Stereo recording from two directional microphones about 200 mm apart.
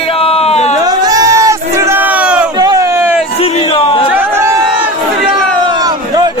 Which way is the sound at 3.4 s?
30° left (ahead or behind).